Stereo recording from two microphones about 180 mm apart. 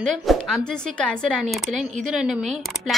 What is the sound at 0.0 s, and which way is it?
A woman's voice, centre (ahead or behind).